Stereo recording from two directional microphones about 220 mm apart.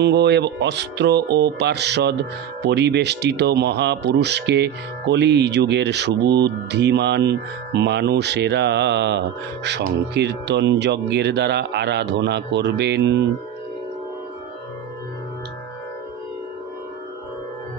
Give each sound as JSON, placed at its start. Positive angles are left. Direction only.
{"t": 0.0, "sound": "speech", "side_deg": -50}